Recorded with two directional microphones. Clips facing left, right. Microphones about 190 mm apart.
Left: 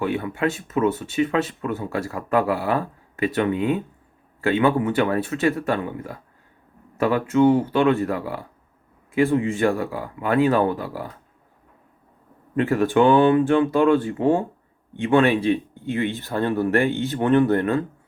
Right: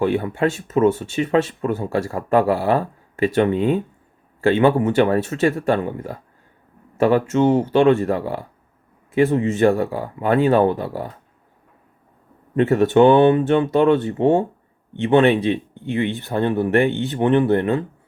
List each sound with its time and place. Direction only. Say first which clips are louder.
0.0 s a man's voice: right 4 dB; 30° right (ahead or behind)
12.5 s speech: right 4 dB; 25° right (ahead or behind)